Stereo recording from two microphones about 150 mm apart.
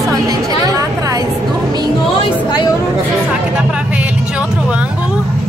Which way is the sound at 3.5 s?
5° right (ahead or behind).